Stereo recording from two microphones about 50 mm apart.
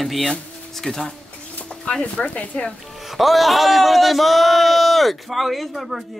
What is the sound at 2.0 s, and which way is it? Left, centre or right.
Speech, left.